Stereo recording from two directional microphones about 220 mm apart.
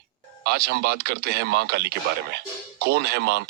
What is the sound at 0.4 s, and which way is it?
Speech, 45° right (ahead or behind).